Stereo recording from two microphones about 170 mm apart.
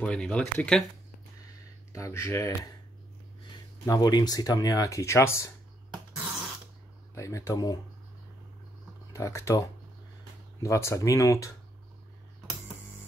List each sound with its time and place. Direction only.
0.0 s speech: 5° left (ahead or behind)
1.9 s speech: 20° left (ahead or behind)
3.8 s speech: 20° left (ahead or behind)
7.2 s speech: 20° left (ahead or behind)
9.1 s speech: 20° left (ahead or behind)